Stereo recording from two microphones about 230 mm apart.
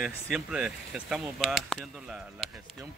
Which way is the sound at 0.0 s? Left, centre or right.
Centre.